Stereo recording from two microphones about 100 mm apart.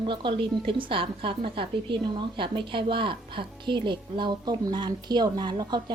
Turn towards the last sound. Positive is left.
turn(degrees=-45)  # may be behind; listen again after turning